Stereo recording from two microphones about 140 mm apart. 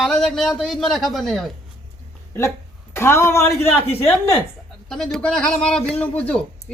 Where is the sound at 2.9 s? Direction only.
20° left (ahead or behind).